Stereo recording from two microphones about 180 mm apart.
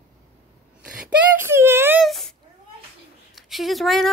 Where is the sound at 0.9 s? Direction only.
10° right (ahead or behind).